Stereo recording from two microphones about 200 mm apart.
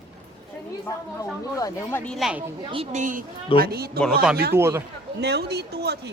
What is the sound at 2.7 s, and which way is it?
Speech, 35° right (ahead or behind).